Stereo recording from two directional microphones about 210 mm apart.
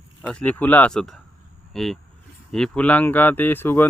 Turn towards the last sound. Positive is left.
turn(degrees=10)  # may be behind; listen again after turning